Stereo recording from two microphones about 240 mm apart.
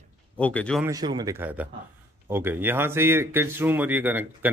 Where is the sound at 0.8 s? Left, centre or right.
Centre.